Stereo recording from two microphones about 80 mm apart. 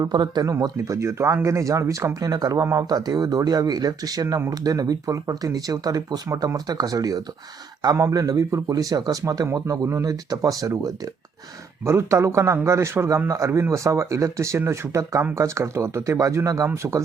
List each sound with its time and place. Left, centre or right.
0.0 s speech: right
0.6 s speech: right
11.9 s speech: right